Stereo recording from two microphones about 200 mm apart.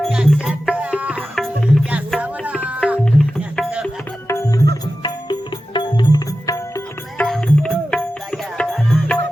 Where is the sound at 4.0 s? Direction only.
10° left (ahead or behind).